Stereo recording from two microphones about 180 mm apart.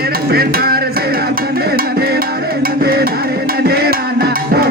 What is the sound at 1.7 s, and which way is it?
Music, 60° right (ahead or behind).